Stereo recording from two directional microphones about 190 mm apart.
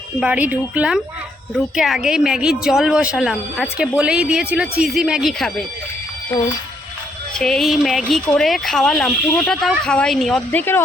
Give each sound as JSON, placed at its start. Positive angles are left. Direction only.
{"t": 0.2, "sound": "a woman's voice", "side_deg": -5}
{"t": 7.3, "sound": "a woman's voice", "side_deg": 0}